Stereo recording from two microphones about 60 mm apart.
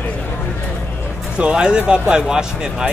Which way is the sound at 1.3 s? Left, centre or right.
Centre.